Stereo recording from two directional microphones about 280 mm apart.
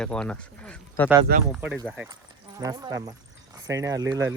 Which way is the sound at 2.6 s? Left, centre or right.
Centre.